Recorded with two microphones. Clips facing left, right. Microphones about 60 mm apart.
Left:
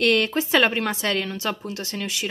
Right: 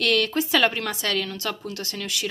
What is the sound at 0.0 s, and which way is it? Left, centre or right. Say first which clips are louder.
Speech: left 2 dB; left.